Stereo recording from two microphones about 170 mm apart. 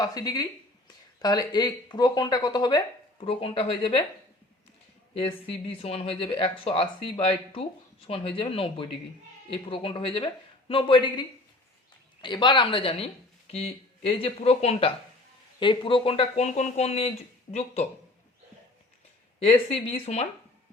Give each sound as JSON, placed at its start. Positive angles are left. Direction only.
{"t": 0.0, "sound": "speech", "side_deg": 20}
{"t": 5.1, "sound": "speech", "side_deg": 35}
{"t": 19.4, "sound": "speech", "side_deg": 35}